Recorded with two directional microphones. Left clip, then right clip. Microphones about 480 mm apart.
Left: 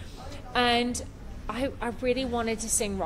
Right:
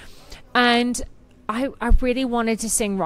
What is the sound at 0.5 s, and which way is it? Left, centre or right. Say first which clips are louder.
A woman's voice: right 7 dB; right.